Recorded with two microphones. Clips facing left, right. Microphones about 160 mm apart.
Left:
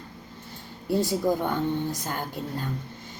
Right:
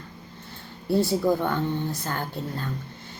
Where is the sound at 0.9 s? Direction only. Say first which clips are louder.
Right 2 dB; 15° left (ahead or behind).